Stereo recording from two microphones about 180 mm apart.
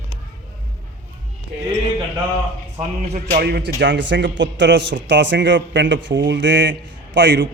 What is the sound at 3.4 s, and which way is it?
A man's voice, 65° right (ahead or behind).